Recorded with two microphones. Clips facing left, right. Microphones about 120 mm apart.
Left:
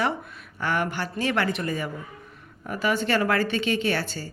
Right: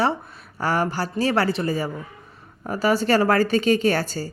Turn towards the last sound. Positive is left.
turn(degrees=-40)  # may be behind; listen again after turning